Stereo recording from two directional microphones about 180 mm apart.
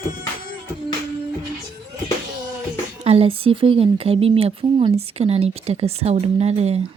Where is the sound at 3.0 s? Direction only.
35° right (ahead or behind).